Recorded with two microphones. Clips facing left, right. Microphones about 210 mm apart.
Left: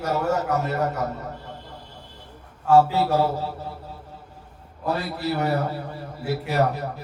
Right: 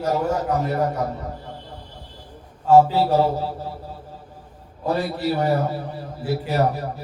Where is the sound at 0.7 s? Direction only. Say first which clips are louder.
Right 2 dB; 10° right (ahead or behind).